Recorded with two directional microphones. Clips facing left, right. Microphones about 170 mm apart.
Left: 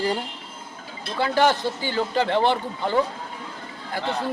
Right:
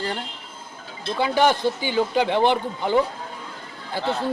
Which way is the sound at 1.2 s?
15° right (ahead or behind).